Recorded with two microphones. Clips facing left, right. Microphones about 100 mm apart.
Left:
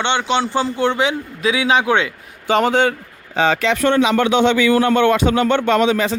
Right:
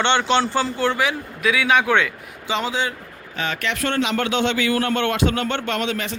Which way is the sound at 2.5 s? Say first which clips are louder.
Left 8 dB; 55° left (ahead or behind).